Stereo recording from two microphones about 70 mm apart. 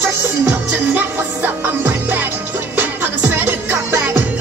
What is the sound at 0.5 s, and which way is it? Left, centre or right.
Music, right.